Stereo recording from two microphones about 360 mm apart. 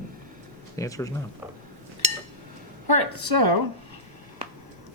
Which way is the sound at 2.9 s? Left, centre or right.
Right.